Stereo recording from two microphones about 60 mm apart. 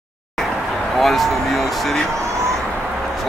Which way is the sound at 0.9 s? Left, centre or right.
Centre.